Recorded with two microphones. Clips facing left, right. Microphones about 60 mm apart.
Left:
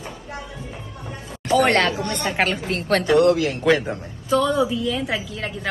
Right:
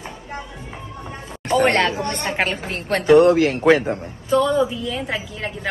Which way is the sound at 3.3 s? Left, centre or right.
Right.